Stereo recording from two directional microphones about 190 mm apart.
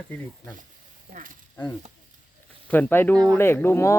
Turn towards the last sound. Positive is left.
turn(degrees=10)  # may be behind; listen again after turning